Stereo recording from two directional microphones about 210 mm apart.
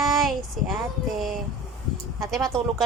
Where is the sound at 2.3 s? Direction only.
Centre (ahead or behind).